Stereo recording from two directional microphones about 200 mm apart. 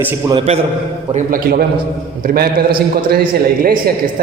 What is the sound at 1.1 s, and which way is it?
A man's voice, 45° right (ahead or behind).